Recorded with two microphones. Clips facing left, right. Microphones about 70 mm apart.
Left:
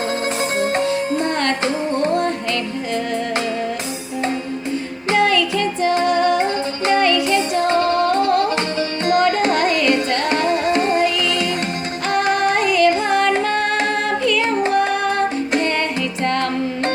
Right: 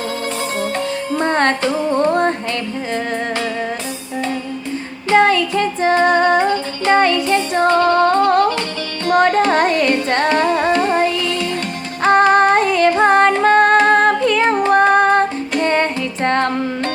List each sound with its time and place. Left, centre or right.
0.6 s music: left
1.2 s music: right
5.1 s female singing: right
6.9 s music: right
9.5 s carnatic music: right
10.3 s music: right
10.7 s music: left
12.0 s music: right